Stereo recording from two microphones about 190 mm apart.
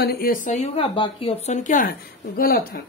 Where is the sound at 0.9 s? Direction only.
25° left (ahead or behind); by 2.8 s 50° left (ahead or behind).